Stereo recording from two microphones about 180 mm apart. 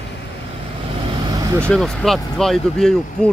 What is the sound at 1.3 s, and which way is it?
Vehicle, 20° right (ahead or behind).